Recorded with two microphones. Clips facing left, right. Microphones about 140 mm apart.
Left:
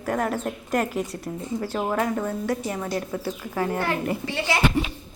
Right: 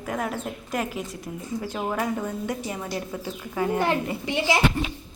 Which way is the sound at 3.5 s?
15° right (ahead or behind).